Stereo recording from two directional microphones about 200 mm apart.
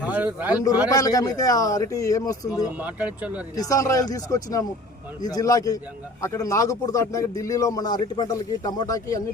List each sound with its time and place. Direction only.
0.0 s a man's voice: 10° right (ahead or behind)
0.9 s a man's voice: 15° left (ahead or behind)
2.8 s speech: 5° right (ahead or behind)
3.5 s a man's voice: 15° left (ahead or behind)